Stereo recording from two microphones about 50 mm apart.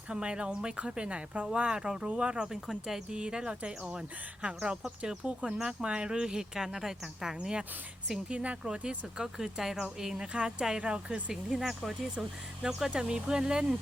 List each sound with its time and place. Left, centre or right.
0.1 s speech: right
2.5 s speech: centre
3.1 s speech: centre
11.5 s speech: centre
12.9 s speech: centre